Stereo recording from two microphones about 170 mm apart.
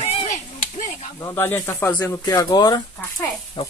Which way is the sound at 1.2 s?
15° left (ahead or behind).